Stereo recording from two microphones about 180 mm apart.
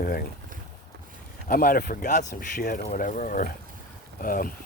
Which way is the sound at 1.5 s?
55° left (ahead or behind).